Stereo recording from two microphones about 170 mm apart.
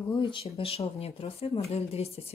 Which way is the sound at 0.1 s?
30° left (ahead or behind).